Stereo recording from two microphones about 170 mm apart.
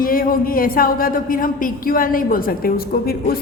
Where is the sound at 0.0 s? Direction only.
55° left (ahead or behind).